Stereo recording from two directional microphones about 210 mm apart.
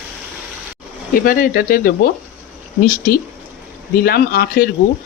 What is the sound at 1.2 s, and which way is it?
Speech, 45° left (ahead or behind).